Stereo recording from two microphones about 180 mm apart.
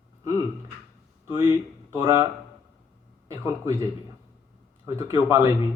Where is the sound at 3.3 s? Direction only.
15° right (ahead or behind).